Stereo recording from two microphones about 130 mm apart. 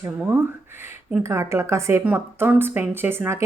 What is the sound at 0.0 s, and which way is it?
Speech, 20° right (ahead or behind).